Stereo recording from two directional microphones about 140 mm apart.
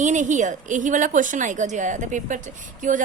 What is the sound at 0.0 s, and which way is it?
A woman's voice, 60° right (ahead or behind).